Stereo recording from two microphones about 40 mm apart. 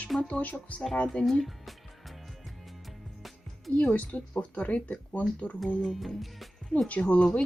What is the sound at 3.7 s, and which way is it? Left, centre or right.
Speech, left.